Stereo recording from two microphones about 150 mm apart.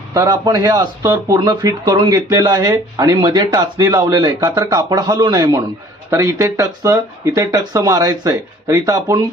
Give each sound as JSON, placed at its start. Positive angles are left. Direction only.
{"t": 0.1, "sound": "speech", "side_deg": -25}